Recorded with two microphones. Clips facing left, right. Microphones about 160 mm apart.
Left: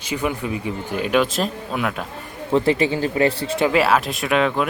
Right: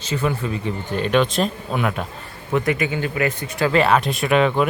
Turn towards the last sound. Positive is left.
turn(degrees=0)  # may be behind; listen again after turning